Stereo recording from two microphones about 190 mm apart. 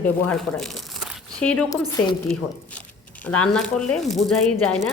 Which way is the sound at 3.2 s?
5° left (ahead or behind).